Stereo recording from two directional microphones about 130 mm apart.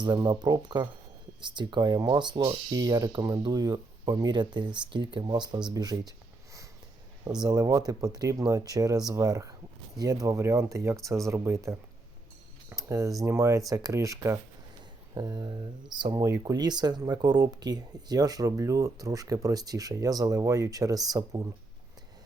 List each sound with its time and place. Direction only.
0.0 s speech: 35° right (ahead or behind)
5.7 s a sound: 30° right (ahead or behind)
7.4 s speech: 30° right (ahead or behind)